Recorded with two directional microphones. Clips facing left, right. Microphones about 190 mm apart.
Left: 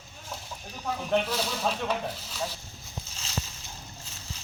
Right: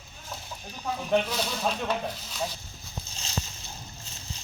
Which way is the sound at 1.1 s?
5° left (ahead or behind).